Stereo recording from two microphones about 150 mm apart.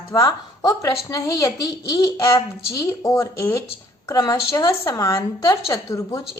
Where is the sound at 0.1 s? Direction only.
20° left (ahead or behind).